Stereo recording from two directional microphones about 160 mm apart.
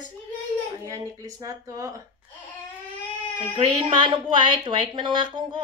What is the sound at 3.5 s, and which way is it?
A woman's voice, 30° right (ahead or behind).